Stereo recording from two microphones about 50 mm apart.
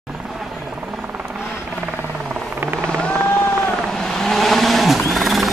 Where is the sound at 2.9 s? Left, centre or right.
Centre.